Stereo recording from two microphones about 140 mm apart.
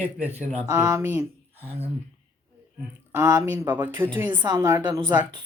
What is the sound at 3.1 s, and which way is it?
Speech, 25° right (ahead or behind).